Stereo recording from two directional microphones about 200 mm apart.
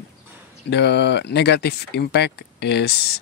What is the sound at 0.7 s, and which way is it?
Speech, 60° left (ahead or behind).